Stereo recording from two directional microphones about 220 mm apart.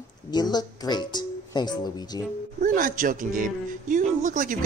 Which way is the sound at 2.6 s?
40° right (ahead or behind).